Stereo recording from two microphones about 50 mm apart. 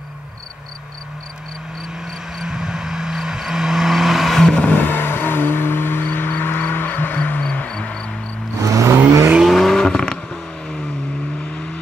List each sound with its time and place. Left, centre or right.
2.3 s vehicle: centre
4.6 s vehicle: left
4.8 s vehicle: left; by 8.0 s centre
8.5 s vehicle: right
9.4 s vehicle: centre